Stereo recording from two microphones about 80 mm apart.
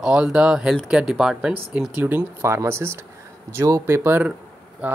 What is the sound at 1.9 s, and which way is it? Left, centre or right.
Speech, right.